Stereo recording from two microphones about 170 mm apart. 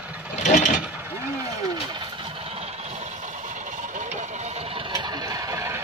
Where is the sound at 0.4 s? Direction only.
45° left (ahead or behind).